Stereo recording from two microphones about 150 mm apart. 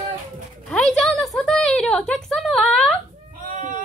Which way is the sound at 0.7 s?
5° left (ahead or behind).